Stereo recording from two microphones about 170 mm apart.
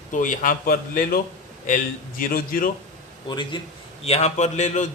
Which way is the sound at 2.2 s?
60° left (ahead or behind).